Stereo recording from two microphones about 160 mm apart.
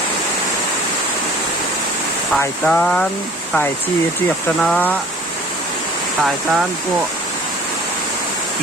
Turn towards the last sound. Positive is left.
turn(degrees=-5)  # may be behind; listen again after turning